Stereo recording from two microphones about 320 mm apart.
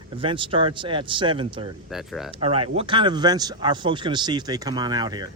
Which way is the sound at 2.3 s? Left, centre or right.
Centre.